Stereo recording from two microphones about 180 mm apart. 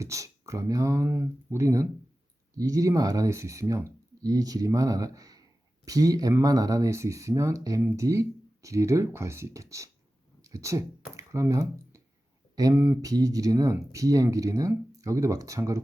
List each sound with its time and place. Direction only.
0.0 s speech: 15° right (ahead or behind)